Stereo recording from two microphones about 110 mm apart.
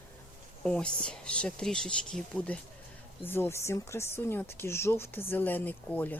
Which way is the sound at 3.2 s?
20° left (ahead or behind).